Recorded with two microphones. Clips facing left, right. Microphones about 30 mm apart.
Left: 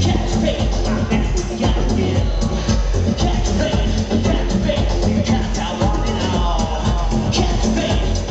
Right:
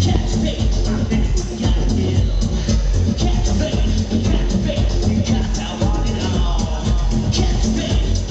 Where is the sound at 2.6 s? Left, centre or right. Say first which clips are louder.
Even; centre.